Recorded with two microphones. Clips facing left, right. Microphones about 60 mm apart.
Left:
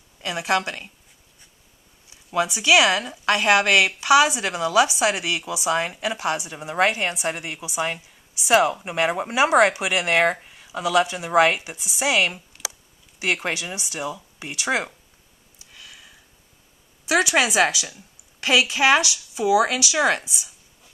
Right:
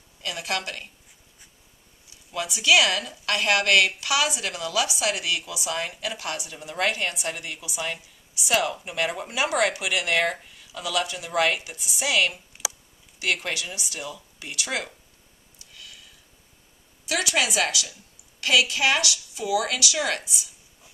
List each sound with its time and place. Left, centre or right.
0.2 s speech: left
2.3 s speech: left
12.6 s a sound: centre
13.2 s speech: left
15.6 s a sound: centre
17.0 s speech: centre